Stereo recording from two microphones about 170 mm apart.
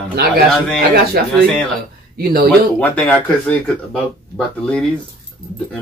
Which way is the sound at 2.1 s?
60° right (ahead or behind).